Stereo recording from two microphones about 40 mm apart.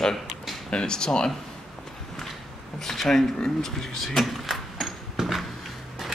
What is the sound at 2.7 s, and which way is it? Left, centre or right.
Speech, centre.